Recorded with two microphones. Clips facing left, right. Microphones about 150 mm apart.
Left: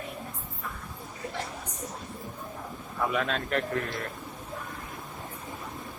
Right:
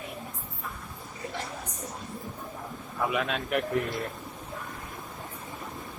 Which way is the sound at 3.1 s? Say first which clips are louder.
Even; 5° right (ahead or behind).